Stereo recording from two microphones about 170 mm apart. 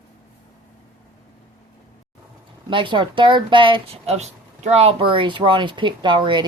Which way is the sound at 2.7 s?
30° right (ahead or behind).